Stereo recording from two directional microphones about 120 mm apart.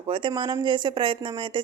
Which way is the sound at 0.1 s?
45° right (ahead or behind).